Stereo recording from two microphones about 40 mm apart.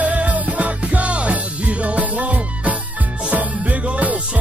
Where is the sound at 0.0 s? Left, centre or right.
Right.